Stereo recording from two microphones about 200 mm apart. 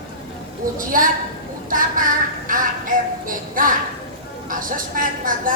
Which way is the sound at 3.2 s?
45° right (ahead or behind).